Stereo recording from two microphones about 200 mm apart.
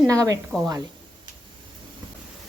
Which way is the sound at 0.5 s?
5° right (ahead or behind).